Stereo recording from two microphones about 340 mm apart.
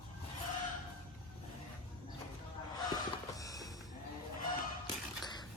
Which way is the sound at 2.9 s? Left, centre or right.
Centre.